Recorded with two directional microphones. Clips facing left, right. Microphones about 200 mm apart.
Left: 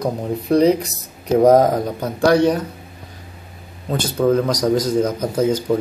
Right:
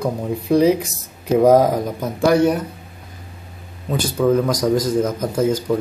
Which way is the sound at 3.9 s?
Centre (ahead or behind).